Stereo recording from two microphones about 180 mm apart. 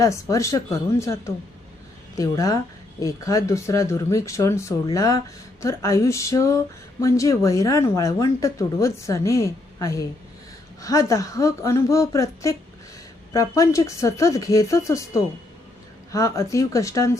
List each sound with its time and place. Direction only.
0.0 s speech: 15° left (ahead or behind)